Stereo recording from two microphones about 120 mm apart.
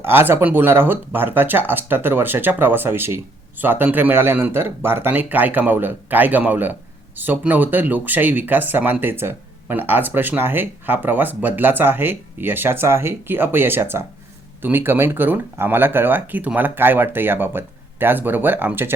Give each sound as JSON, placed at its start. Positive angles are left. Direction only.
{"t": 0.0, "sound": "speech", "side_deg": -20}